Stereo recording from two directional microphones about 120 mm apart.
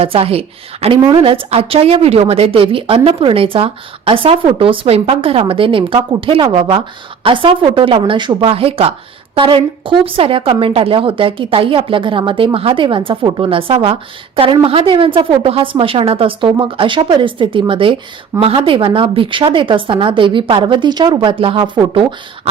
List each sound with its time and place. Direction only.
0.0 s a woman's voice: 55° right (ahead or behind)